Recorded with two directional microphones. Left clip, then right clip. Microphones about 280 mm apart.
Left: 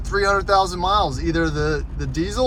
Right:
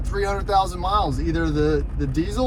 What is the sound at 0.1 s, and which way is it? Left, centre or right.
Speech, left.